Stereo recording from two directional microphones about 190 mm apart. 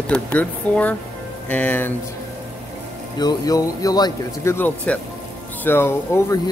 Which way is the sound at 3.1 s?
20° left (ahead or behind).